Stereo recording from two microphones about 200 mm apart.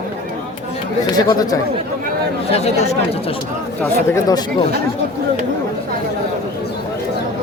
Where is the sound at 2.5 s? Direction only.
30° left (ahead or behind).